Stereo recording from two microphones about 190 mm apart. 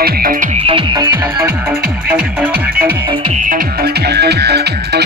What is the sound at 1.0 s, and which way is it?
Music, 10° right (ahead or behind).